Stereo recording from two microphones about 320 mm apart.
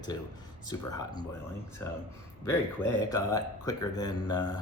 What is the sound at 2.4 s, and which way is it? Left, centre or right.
A man's voice, centre.